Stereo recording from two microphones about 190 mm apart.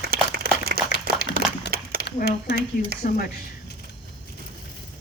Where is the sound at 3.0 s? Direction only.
45° left (ahead or behind).